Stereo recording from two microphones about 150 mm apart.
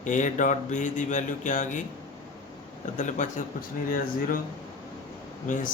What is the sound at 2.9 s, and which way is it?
Speech, 55° left (ahead or behind).